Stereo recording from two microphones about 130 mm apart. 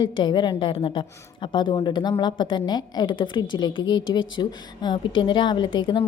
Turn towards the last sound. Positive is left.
turn(degrees=40)  # may be behind; listen again after turning